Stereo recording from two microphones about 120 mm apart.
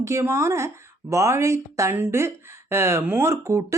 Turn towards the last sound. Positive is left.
turn(degrees=-25)  # may be behind; listen again after turning